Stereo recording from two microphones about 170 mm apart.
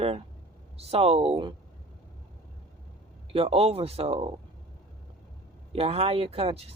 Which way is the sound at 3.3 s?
35° right (ahead or behind).